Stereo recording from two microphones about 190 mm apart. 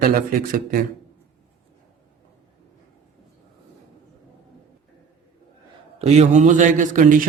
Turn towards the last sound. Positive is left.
turn(degrees=-40)  # may be behind; listen again after turning